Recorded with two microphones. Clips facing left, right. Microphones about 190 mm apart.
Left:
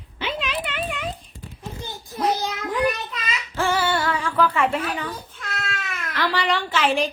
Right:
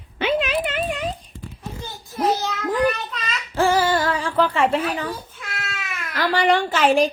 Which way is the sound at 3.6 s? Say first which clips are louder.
Right 4 dB; 35° right (ahead or behind).